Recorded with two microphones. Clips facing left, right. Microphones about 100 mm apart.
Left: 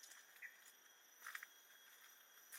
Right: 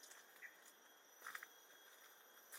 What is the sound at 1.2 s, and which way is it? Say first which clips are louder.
Walk: right 1 dB; 10° right (ahead or behind).